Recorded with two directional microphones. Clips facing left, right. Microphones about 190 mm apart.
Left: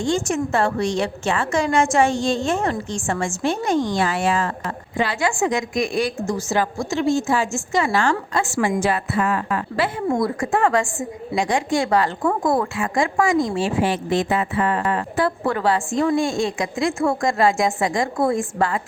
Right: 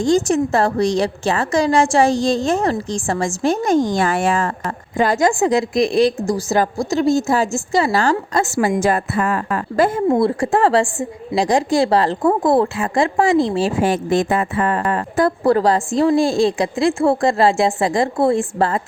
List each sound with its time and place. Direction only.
0.0 s a woman's voice: 40° right (ahead or behind)
10.2 s a woman's voice: 30° right (ahead or behind)